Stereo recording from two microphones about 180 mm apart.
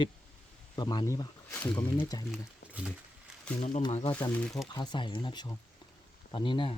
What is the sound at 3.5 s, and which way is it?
Speech, 40° left (ahead or behind).